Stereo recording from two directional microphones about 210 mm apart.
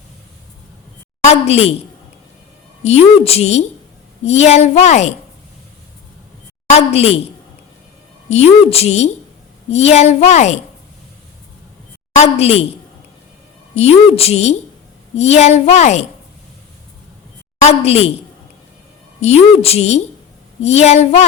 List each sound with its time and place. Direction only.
1.2 s a woman's voice: 30° left (ahead or behind)
2.8 s a woman's voice: 30° left (ahead or behind)
6.7 s a woman's voice: 30° left (ahead or behind)
8.3 s a woman's voice: 30° left (ahead or behind)
12.1 s a woman's voice: 30° left (ahead or behind)
13.7 s a woman's voice: 30° left (ahead or behind)
17.6 s a woman's voice: 30° left (ahead or behind)
19.2 s a woman's voice: 30° left (ahead or behind)